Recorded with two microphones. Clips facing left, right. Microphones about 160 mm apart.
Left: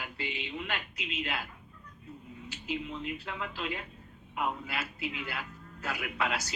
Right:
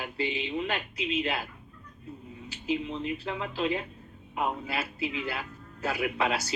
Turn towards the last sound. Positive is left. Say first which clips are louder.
# right 5 dB
turn(degrees=-30)  # may be behind; listen again after turning